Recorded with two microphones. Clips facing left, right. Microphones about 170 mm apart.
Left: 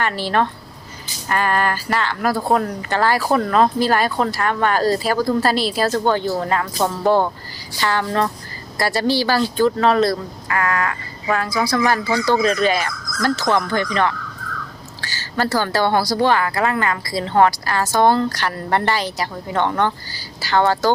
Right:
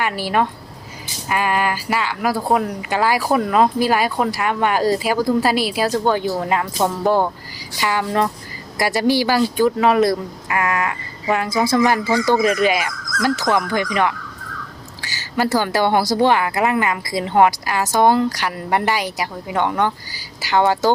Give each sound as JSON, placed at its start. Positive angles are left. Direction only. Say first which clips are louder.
{"t": 0.0, "sound": "a woman's voice", "louder": "even", "side_deg": -10}